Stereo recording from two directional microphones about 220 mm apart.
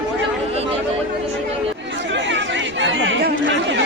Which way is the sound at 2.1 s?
55° right (ahead or behind).